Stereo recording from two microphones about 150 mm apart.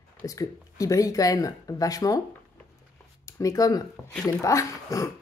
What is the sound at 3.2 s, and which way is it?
Speech, 20° left (ahead or behind).